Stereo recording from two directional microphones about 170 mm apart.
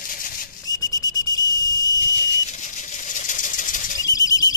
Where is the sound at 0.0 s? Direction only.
55° left (ahead or behind).